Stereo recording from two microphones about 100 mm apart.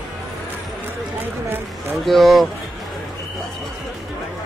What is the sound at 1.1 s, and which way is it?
Run, 20° right (ahead or behind).